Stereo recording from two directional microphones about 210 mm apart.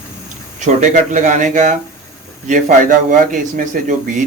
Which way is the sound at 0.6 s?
35° right (ahead or behind).